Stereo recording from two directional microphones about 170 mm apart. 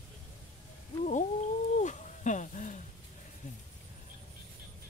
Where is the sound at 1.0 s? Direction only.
45° left (ahead or behind).